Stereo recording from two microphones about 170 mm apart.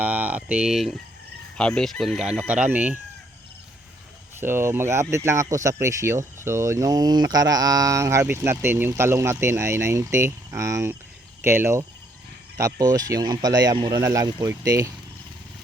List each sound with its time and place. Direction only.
0.0 s speech: 10° right (ahead or behind)
4.4 s speech: 15° right (ahead or behind)